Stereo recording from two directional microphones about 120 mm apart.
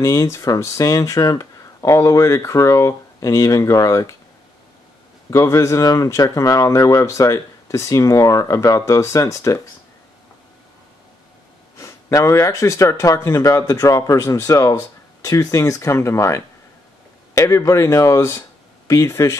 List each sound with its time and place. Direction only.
0.0 s speech: 30° left (ahead or behind)
5.3 s speech: 25° left (ahead or behind)
11.7 s speech: 25° left (ahead or behind)